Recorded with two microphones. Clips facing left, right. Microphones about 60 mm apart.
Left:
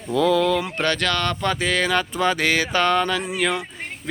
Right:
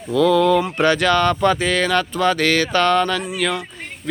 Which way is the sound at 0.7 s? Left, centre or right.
Centre.